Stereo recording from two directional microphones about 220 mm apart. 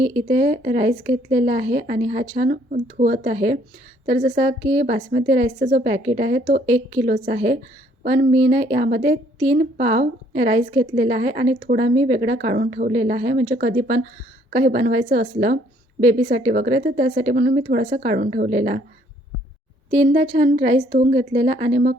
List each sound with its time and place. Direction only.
0.0 s speech: 25° right (ahead or behind)
12.5 s a woman's voice: 40° right (ahead or behind)
12.9 s a woman's voice: 30° right (ahead or behind)
18.5 s speech: 30° right (ahead or behind)
19.9 s a woman's voice: 30° right (ahead or behind)